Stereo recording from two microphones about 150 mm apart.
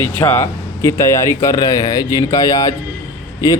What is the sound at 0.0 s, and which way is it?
A man's voice, 15° left (ahead or behind).